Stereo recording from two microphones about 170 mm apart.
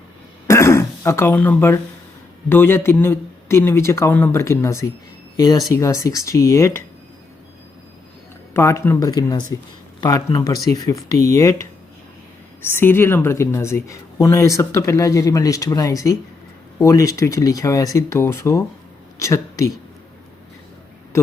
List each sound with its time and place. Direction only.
0.4 s throat clearing: 15° left (ahead or behind)
2.5 s a woman's voice: 15° left (ahead or behind)
8.5 s a woman's voice: 15° left (ahead or behind)
12.7 s a woman's voice: 15° left (ahead or behind)